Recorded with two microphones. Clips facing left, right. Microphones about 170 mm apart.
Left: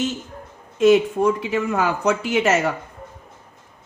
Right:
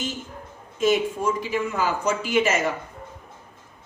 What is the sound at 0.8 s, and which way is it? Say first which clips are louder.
Speech: left 7 dB; 65° left (ahead or behind).